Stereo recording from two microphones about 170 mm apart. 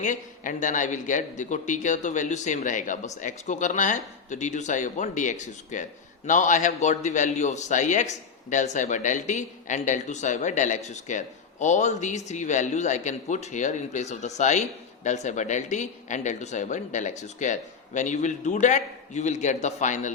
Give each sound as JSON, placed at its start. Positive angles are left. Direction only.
{"t": 0.0, "sound": "a man's voice", "side_deg": 50}